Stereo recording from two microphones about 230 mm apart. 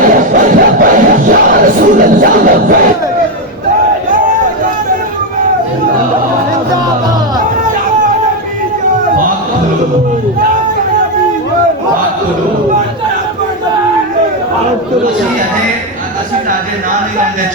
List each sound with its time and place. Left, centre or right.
0.0 s crowd: right